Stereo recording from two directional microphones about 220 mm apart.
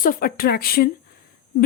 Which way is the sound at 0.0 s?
40° left (ahead or behind).